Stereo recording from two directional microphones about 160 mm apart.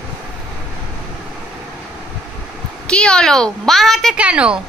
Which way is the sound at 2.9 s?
5° left (ahead or behind).